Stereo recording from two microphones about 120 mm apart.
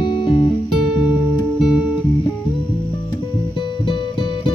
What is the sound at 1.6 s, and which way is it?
Music, 10° right (ahead or behind).